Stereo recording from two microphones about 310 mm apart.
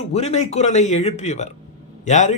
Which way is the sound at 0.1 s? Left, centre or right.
Centre.